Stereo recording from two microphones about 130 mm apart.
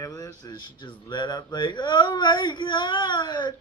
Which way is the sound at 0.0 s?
30° left (ahead or behind).